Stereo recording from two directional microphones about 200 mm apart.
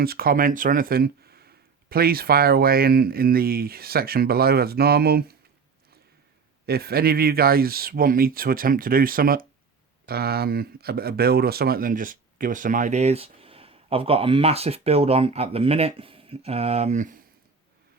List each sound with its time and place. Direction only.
0.0 s speech: 50° right (ahead or behind)
6.7 s speech: 50° right (ahead or behind)